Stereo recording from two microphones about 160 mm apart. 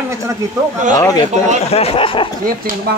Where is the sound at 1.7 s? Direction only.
40° left (ahead or behind).